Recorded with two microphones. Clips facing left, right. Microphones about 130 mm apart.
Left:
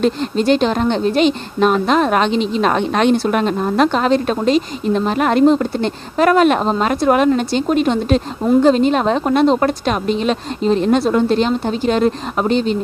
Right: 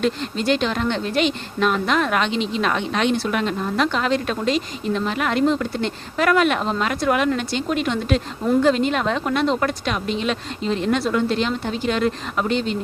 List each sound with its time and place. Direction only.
0.0 s a woman's voice: 35° left (ahead or behind)